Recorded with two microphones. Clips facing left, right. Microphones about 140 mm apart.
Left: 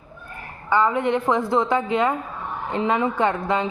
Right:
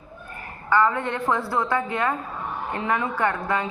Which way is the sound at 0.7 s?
15° left (ahead or behind).